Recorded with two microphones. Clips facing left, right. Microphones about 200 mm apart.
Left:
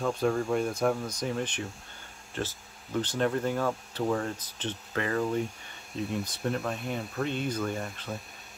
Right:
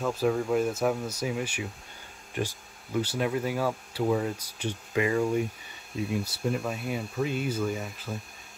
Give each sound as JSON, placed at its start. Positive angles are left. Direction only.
{"t": 0.0, "sound": "speech", "side_deg": -5}